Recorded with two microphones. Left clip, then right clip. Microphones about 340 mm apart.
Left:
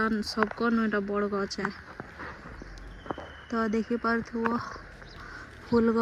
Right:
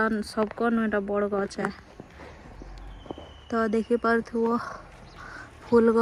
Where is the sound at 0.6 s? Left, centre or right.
Centre.